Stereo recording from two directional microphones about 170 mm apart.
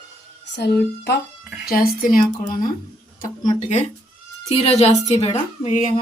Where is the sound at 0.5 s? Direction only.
80° left.